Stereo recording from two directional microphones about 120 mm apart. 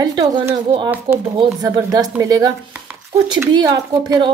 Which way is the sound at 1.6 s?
30° right (ahead or behind).